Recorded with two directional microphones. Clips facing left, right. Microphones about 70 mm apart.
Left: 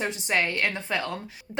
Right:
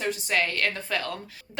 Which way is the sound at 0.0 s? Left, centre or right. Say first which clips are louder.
Even; left.